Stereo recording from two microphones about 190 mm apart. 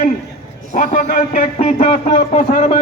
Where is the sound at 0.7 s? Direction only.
40° left (ahead or behind).